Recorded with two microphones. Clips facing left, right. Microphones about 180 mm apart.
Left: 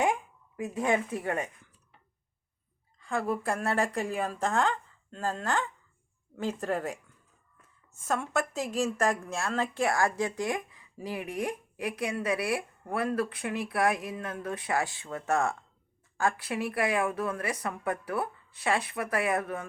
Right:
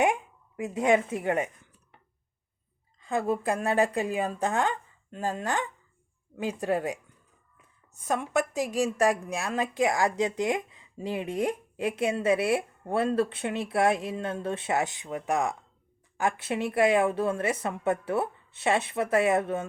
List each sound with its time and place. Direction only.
0.0 s speech: 20° right (ahead or behind)
3.0 s speech: 20° right (ahead or behind)
8.0 s speech: 15° right (ahead or behind)